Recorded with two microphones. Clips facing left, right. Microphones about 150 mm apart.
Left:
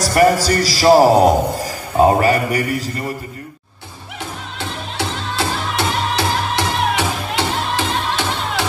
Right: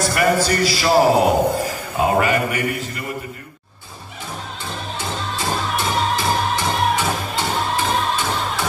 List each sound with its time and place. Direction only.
0.0 s a man's voice: 40° left (ahead or behind)
4.6 s music: 80° left